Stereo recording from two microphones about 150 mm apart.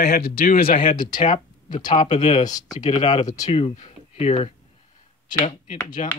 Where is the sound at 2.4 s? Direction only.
25° left (ahead or behind).